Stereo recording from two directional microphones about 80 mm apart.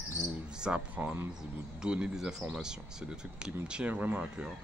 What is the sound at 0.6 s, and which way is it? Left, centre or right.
Speech, centre.